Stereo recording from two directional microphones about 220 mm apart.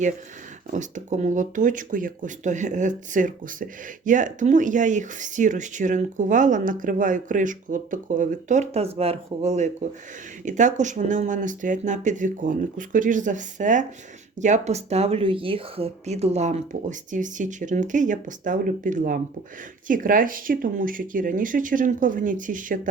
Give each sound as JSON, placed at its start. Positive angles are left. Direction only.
{"t": 0.7, "sound": "speech", "side_deg": -35}